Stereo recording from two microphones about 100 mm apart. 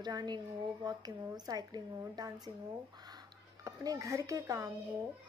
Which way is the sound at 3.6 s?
35° right (ahead or behind).